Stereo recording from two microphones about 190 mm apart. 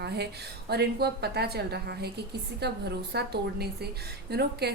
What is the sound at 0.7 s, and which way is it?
A woman's voice, 60° right (ahead or behind).